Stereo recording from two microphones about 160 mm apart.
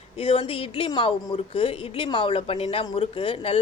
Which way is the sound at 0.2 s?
35° left (ahead or behind).